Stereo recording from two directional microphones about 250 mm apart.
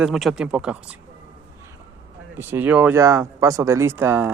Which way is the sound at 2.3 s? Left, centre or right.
Centre.